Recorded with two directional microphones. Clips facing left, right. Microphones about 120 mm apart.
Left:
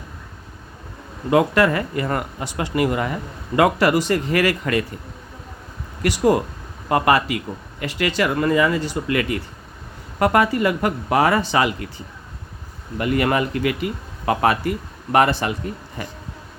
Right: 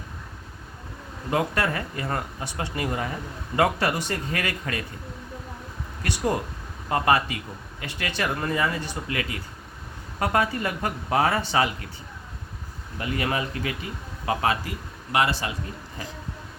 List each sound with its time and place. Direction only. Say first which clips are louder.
1.3 s speech: left 8 dB; 90° left; by 3.1 s 75° left (ahead or behind)
3.5 s speech: left 7 dB; 90° left
6.0 s speech: left 8 dB; 90° left
6.8 s speech: left 4 dB; 70° left (ahead or behind)
7.8 s speech: left 8 dB; 90° left
13.0 s speech: left 8 dB; 65° left (ahead or behind)